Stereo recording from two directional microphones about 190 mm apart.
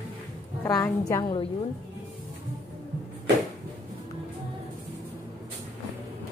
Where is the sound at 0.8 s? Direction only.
20° left (ahead or behind).